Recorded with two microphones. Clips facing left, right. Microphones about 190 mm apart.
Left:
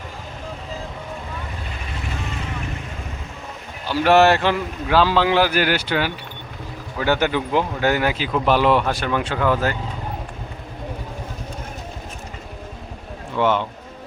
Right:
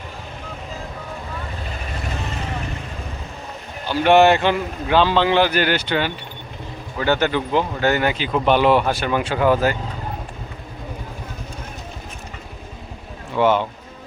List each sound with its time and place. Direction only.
3.8 s speech: centre (ahead or behind)
13.3 s speech: 5° right (ahead or behind)